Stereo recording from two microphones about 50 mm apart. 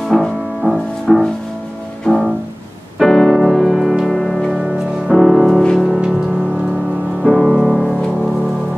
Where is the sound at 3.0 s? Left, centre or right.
Centre.